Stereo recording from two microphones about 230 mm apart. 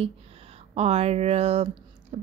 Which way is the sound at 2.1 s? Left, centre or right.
Right.